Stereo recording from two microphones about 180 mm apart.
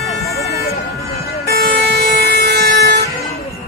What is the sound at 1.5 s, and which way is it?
Vehicle, 60° right (ahead or behind).